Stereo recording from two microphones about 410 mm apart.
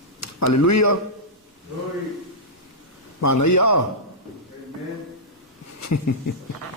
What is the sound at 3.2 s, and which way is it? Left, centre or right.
Speech, left.